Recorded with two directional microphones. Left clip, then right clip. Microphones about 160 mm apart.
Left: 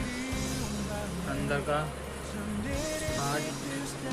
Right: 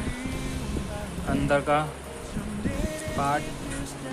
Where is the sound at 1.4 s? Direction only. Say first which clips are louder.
Right 8 dB; 50° right (ahead or behind).